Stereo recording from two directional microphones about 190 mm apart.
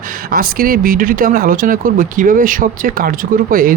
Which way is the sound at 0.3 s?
50° right (ahead or behind).